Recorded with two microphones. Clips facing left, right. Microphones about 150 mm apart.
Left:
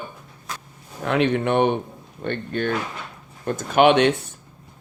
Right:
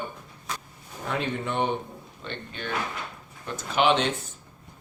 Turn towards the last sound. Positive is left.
turn(degrees=65)  # may be behind; listen again after turning